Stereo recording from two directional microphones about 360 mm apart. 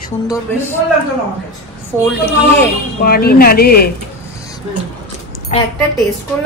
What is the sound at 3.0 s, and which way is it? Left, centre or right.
Speech, left.